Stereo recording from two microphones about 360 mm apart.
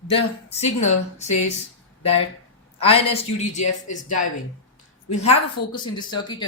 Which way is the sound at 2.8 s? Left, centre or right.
Centre.